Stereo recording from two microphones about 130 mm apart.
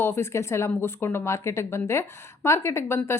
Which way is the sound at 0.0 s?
20° left (ahead or behind).